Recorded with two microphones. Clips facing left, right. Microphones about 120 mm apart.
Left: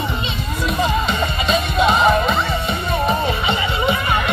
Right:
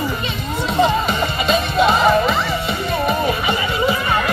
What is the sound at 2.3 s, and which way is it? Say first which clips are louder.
Music: even; 25° left (ahead or behind).